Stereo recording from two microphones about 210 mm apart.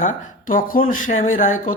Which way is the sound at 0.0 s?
35° left (ahead or behind).